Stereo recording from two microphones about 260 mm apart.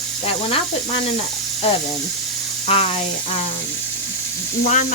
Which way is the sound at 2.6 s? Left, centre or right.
Left.